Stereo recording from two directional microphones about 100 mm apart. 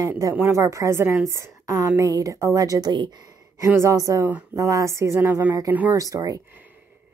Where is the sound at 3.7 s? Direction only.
30° right (ahead or behind).